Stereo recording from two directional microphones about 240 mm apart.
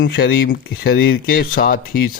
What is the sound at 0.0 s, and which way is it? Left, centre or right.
A man's voice, left.